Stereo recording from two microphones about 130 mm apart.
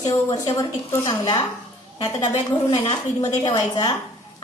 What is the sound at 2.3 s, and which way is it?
Speech, 50° left (ahead or behind).